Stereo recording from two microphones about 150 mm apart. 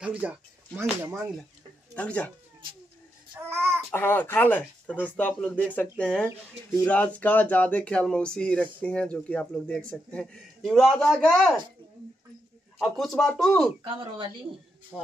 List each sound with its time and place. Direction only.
0.0 s speech: 10° right (ahead or behind)
2.0 s a man's voice: 10° left (ahead or behind)
3.3 s a child's voice: 15° right (ahead or behind)
3.9 s a man's voice: 15° left (ahead or behind)
12.8 s speech: centre (ahead or behind)
13.8 s speech: 35° right (ahead or behind)